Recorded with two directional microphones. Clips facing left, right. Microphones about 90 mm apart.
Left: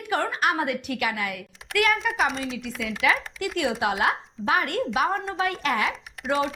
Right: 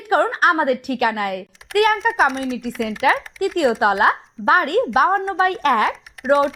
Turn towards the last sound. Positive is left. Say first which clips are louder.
# right 10 dB
turn(degrees=0)  # may be behind; listen again after turning